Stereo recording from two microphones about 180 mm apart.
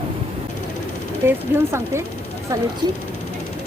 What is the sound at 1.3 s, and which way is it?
Speech, 15° right (ahead or behind).